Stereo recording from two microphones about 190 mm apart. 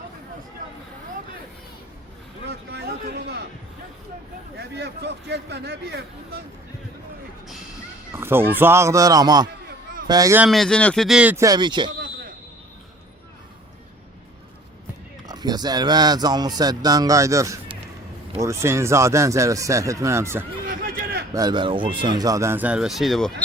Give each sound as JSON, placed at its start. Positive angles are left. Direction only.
{"t": 2.5, "sound": "a sound", "side_deg": -60}
{"t": 4.5, "sound": "speech", "side_deg": -65}
{"t": 8.1, "sound": "speech", "side_deg": -10}
{"t": 10.4, "sound": "speech", "side_deg": 0}
{"t": 15.3, "sound": "speech", "side_deg": -20}
{"t": 20.7, "sound": "a sound", "side_deg": -55}
{"t": 21.3, "sound": "speech", "side_deg": -20}